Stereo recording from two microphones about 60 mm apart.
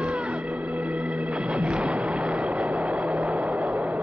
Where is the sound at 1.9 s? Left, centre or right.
Right.